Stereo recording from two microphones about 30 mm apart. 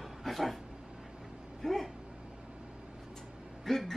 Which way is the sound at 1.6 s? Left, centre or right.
Centre.